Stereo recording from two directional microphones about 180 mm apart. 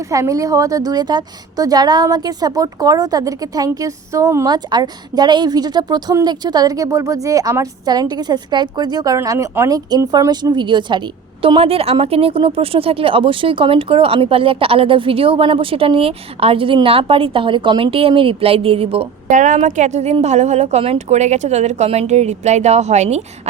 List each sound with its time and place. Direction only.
0.0 s a woman's voice: 20° right (ahead or behind); by 23.2 s 40° right (ahead or behind)